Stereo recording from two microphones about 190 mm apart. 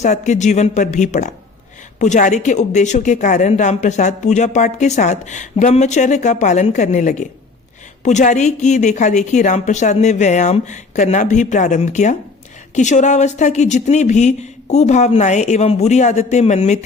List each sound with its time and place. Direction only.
0.0 s a woman's voice: 40° left (ahead or behind)